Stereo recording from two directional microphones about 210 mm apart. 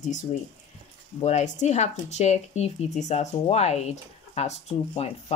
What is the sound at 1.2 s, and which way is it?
Speech, 35° left (ahead or behind).